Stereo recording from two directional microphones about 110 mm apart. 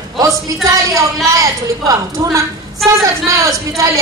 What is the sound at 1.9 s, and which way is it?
A woman's voice, 30° right (ahead or behind).